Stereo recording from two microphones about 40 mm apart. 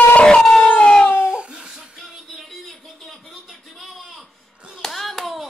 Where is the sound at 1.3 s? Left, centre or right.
Right.